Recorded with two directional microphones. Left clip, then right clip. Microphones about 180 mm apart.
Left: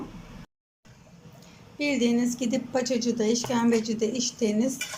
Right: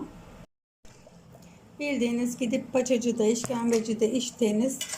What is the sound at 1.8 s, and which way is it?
Speech, 10° right (ahead or behind).